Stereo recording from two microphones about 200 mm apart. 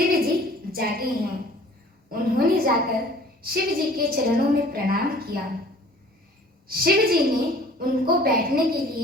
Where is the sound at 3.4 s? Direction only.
50° right (ahead or behind).